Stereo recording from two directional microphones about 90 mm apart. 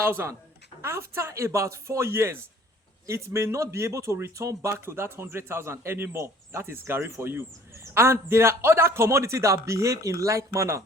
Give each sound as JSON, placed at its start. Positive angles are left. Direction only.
{"t": 0.0, "sound": "a woman's voice", "side_deg": -25}